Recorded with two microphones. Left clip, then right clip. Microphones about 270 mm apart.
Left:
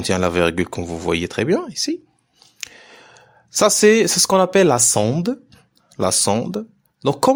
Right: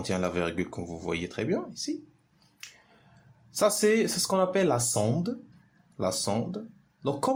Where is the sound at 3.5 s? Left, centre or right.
Left.